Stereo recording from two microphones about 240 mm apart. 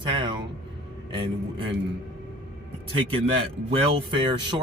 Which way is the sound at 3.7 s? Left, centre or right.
Right.